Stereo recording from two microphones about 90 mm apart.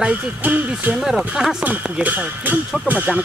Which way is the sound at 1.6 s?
15° right (ahead or behind).